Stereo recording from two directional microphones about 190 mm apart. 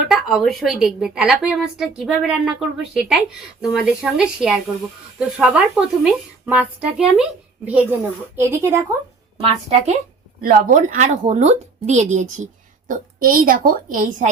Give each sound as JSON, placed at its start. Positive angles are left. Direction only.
{"t": 0.1, "sound": "a woman's voice", "side_deg": 0}
{"t": 8.4, "sound": "speech", "side_deg": -15}
{"t": 9.4, "sound": "a woman's voice", "side_deg": -35}